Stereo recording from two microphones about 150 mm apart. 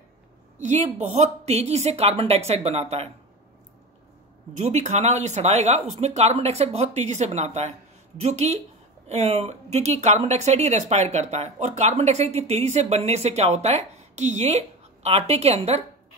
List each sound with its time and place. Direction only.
0.6 s speech: 50° right (ahead or behind)
4.6 s speech: 50° right (ahead or behind)